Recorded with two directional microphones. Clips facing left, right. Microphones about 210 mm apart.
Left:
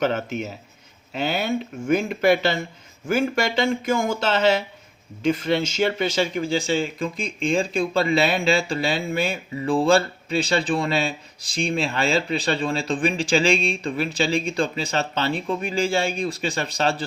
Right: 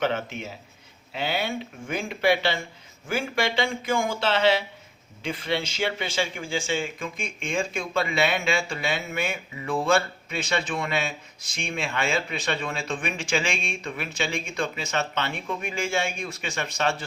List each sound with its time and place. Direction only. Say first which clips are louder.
0.0 s speech: left 4 dB; 40° left (ahead or behind)